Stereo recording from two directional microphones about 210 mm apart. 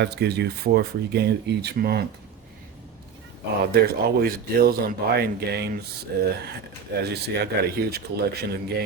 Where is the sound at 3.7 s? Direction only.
50° right (ahead or behind).